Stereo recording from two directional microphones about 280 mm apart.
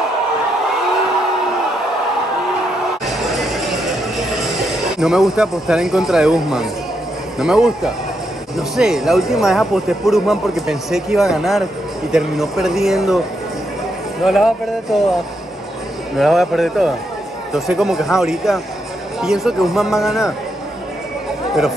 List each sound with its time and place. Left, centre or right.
3.1 s music: centre
4.9 s speech: centre
14.2 s speech: centre
16.2 s speech: centre